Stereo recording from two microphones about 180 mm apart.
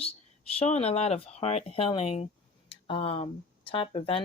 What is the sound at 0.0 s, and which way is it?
Speech, 35° left (ahead or behind).